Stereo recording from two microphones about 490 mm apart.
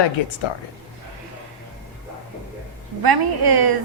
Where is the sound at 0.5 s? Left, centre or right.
Left.